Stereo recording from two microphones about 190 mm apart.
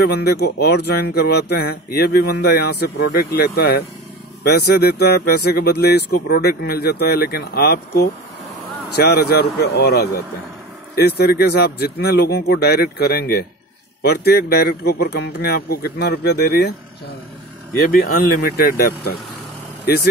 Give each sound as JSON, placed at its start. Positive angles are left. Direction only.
{"t": 0.0, "sound": "speech", "side_deg": 55}
{"t": 17.8, "sound": "speech", "side_deg": 50}